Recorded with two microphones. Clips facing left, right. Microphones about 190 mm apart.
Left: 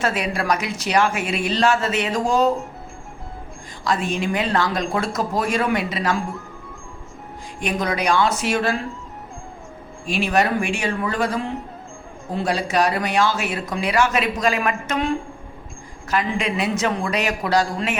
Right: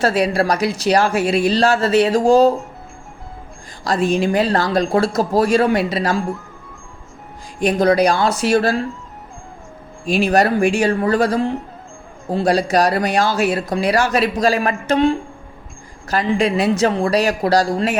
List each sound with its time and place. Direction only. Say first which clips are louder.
0.0 s speech: right 7 dB; 35° right (ahead or behind)
3.8 s speech: right 5 dB; 35° right (ahead or behind)
7.6 s speech: right 9 dB; 35° right (ahead or behind)
10.1 s speech: right 5 dB; 40° right (ahead or behind)